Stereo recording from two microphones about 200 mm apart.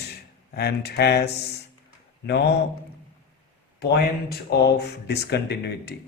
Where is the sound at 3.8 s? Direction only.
55° left (ahead or behind).